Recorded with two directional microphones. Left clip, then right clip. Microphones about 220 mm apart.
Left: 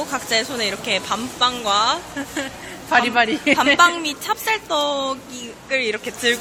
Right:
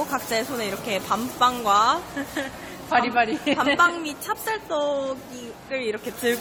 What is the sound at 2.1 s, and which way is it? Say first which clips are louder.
Speech: left 2 dB; 10° left (ahead or behind).